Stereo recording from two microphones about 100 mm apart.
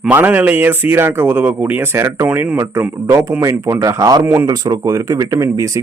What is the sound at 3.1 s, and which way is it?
Speech, 35° right (ahead or behind).